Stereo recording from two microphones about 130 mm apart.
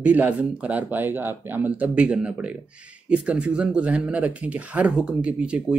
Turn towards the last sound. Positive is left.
turn(degrees=-10)  # may be behind; listen again after turning